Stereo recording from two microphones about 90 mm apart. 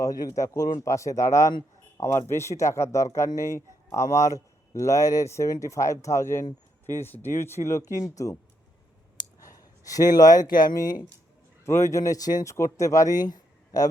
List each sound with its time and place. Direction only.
0.0 s speech: 40° left (ahead or behind)
9.4 s speech: 40° left (ahead or behind)
11.6 s speech: 30° left (ahead or behind); by 13.8 s 50° left (ahead or behind)